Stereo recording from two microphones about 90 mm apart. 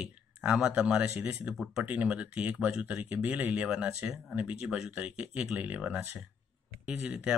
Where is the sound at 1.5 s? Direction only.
Centre (ahead or behind).